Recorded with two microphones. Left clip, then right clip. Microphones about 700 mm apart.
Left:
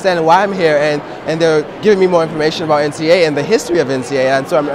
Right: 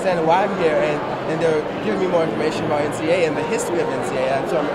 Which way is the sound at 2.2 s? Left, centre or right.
Left.